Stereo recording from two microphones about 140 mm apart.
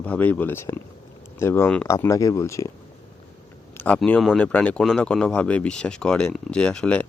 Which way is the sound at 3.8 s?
10° left (ahead or behind).